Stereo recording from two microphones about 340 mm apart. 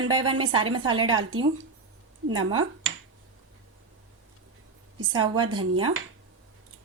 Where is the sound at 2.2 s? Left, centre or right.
Right.